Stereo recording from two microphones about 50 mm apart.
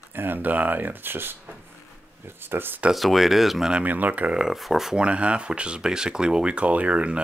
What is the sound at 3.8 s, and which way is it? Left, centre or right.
Speech, right.